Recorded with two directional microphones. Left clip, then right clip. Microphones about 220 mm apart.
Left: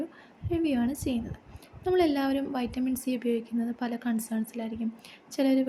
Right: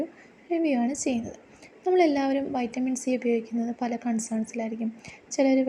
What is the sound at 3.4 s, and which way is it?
Speech, centre (ahead or behind).